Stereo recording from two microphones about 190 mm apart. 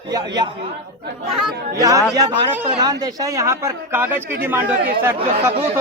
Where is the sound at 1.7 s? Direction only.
20° right (ahead or behind).